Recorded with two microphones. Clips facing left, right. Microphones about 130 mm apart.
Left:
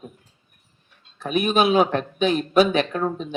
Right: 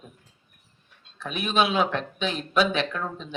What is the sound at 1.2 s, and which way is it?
Speech, 50° left (ahead or behind).